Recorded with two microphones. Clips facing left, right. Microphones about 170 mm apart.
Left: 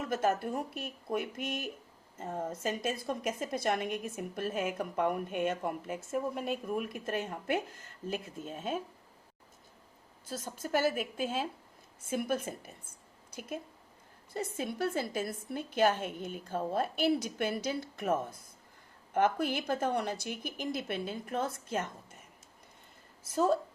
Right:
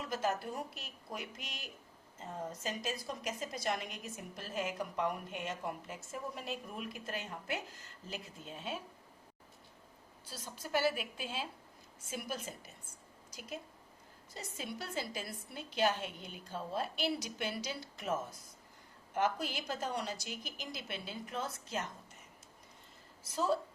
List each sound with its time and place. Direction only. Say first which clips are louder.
0.0 s a woman's voice: left 5 dB; 55° left (ahead or behind)
10.2 s a woman's voice: left 8 dB; 50° left (ahead or behind)
14.3 s a woman's voice: left 9 dB; 50° left (ahead or behind)
23.2 s a woman's voice: left 5 dB; 50° left (ahead or behind)